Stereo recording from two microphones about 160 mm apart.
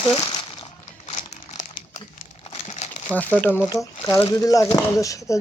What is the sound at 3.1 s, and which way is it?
Speech, 10° left (ahead or behind).